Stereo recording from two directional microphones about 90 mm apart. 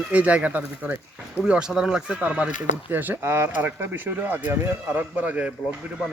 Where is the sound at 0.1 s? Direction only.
15° right (ahead or behind).